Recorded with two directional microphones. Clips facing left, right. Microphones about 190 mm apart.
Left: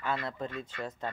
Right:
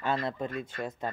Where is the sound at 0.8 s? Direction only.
15° right (ahead or behind).